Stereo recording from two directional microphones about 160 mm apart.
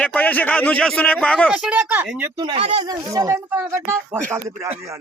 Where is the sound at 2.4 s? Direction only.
30° right (ahead or behind).